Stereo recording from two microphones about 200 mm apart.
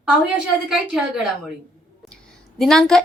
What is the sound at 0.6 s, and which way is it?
Speech, centre (ahead or behind).